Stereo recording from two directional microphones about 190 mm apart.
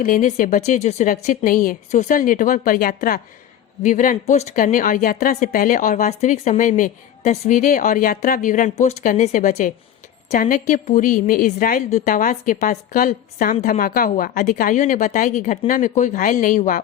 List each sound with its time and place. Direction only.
0.0 s a woman's voice: 45° left (ahead or behind)